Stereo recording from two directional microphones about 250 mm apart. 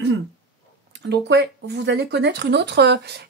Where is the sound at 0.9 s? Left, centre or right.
Right.